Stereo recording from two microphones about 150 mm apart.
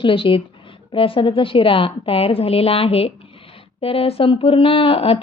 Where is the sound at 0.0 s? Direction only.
35° left (ahead or behind).